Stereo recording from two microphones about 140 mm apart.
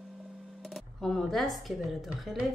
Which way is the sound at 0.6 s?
Centre (ahead or behind).